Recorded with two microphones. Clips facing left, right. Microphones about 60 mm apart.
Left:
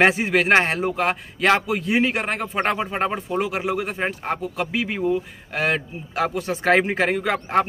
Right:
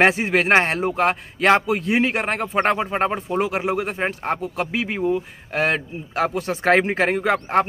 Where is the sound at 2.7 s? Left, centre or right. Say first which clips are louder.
Right 2 dB; centre.